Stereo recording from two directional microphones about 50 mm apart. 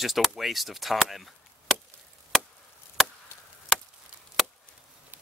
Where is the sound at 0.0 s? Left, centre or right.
Centre.